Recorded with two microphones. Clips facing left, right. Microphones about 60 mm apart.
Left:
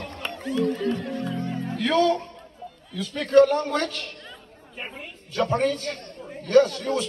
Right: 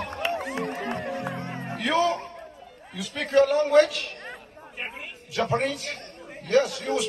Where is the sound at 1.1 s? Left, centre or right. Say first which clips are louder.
Left 2 dB; right.